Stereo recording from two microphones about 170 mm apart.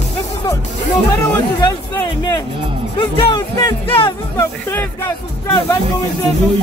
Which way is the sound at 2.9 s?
25° left (ahead or behind).